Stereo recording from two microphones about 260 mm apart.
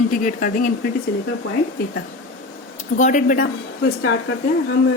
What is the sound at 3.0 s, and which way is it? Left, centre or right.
Speech, left.